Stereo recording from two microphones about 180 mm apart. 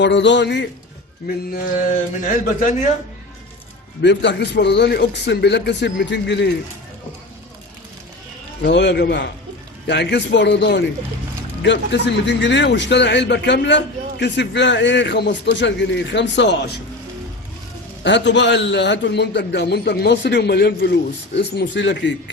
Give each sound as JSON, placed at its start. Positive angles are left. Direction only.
{"t": 0.0, "sound": "a man's voice", "side_deg": 80}
{"t": 2.2, "sound": "a man's voice", "side_deg": 45}
{"t": 4.0, "sound": "a man's voice", "side_deg": 75}
{"t": 8.6, "sound": "a man's voice", "side_deg": 70}
{"t": 18.0, "sound": "a man's voice", "side_deg": 80}